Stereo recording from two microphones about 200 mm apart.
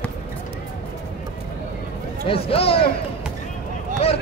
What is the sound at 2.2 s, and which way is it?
Speech, 30° left (ahead or behind).